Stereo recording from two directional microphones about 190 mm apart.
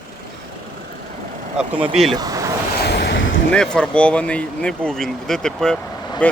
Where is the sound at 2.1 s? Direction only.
20° right (ahead or behind).